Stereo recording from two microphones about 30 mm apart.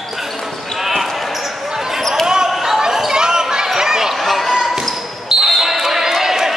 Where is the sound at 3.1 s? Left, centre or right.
Right.